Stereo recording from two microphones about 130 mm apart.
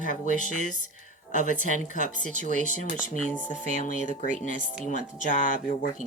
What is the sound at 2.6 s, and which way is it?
Speech, 75° left (ahead or behind).